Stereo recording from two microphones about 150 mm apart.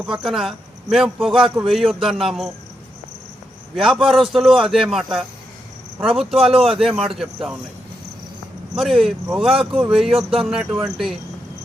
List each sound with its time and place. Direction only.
0.0 s a man's voice: centre (ahead or behind)
3.8 s a man's voice: centre (ahead or behind)
6.3 s speech: 40° right (ahead or behind)
6.7 s a man's voice: 5° right (ahead or behind)
8.7 s a man's voice: centre (ahead or behind)